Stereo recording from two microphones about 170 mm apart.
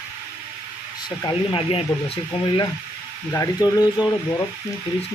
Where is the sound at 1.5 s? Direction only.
35° left (ahead or behind).